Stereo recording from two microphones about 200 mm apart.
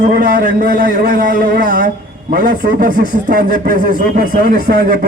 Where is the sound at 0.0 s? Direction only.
45° right (ahead or behind).